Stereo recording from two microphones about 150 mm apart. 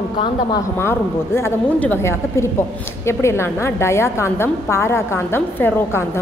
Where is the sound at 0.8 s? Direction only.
15° left (ahead or behind).